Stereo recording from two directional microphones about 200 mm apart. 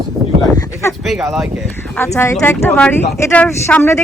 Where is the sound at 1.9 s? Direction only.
10° left (ahead or behind).